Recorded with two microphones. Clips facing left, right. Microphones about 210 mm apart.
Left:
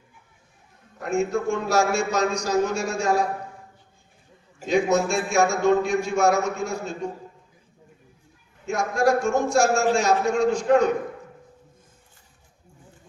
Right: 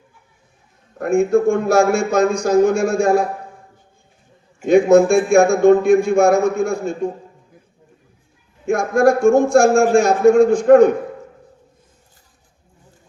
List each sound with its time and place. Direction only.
0.9 s a man's voice: 55° right (ahead or behind)
4.6 s a man's voice: 55° right (ahead or behind)
8.6 s a man's voice: 55° right (ahead or behind)